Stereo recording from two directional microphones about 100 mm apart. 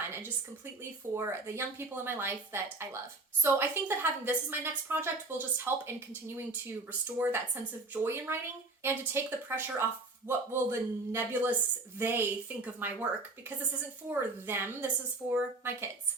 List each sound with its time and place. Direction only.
1.1 s a woman's voice: 25° right (ahead or behind)
14.1 s a woman's voice: 20° right (ahead or behind)